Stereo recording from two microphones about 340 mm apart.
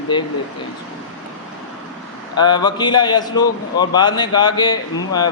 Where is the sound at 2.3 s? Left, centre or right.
Centre.